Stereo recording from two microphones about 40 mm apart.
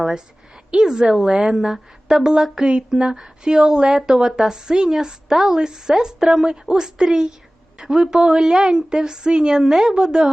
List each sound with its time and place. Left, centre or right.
0.9 s a woman's voice: centre